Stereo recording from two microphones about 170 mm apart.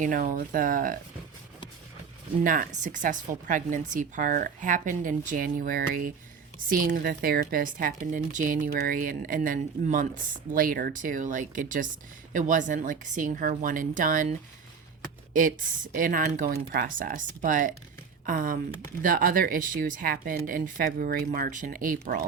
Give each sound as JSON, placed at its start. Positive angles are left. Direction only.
{"t": 0.0, "sound": "speech", "side_deg": -55}
{"t": 2.4, "sound": "speech", "side_deg": -55}